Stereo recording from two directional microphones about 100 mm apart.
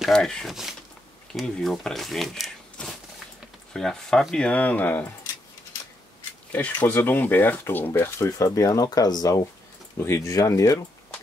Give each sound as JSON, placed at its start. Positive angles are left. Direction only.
{"t": 0.0, "sound": "speech", "side_deg": 5}
{"t": 6.5, "sound": "speech", "side_deg": 20}
{"t": 9.9, "sound": "speech", "side_deg": 25}